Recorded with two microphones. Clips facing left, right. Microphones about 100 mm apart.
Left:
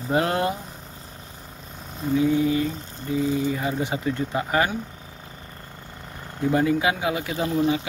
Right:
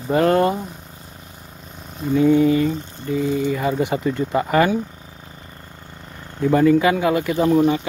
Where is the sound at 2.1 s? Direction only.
60° right (ahead or behind).